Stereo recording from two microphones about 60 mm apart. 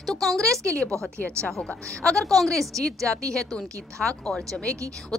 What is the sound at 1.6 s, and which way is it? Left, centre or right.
A woman's voice, centre.